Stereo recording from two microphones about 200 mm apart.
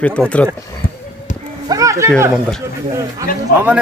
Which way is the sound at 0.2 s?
Centre (ahead or behind).